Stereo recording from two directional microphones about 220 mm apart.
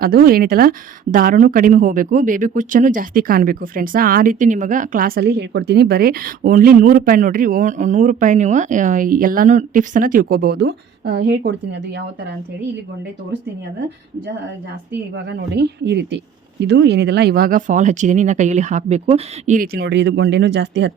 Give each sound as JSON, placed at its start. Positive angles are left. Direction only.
{"t": 0.0, "sound": "a woman's voice", "side_deg": -40}
{"t": 15.1, "sound": "speech", "side_deg": -50}